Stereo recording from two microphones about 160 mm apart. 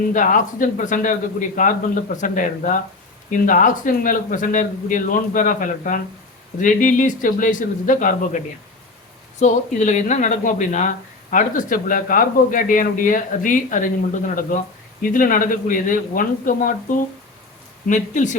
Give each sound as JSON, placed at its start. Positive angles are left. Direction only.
{"t": 0.1, "sound": "a man's voice", "side_deg": 55}
{"t": 9.4, "sound": "speech", "side_deg": 50}
{"t": 15.0, "sound": "speech", "side_deg": 60}
{"t": 17.8, "sound": "a man's voice", "side_deg": 50}